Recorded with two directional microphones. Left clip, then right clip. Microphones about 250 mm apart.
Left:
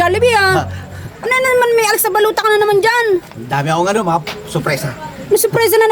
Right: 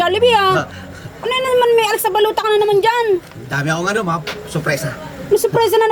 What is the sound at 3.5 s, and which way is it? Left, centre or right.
Speech, centre.